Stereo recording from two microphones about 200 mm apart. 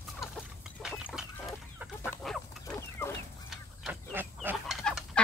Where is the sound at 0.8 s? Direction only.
Centre (ahead or behind).